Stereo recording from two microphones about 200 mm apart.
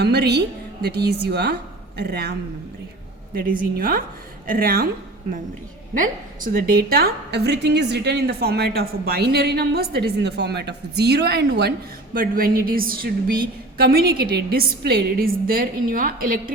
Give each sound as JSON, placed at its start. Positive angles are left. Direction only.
{"t": 0.0, "sound": "a woman's voice", "side_deg": -55}
{"t": 3.3, "sound": "a woman's voice", "side_deg": -45}
{"t": 5.9, "sound": "a woman's voice", "side_deg": -40}